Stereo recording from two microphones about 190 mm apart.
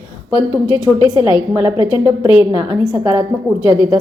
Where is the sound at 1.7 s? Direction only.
25° left (ahead or behind).